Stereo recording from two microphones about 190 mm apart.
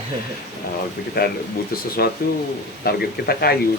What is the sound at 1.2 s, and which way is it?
Speech, 50° left (ahead or behind).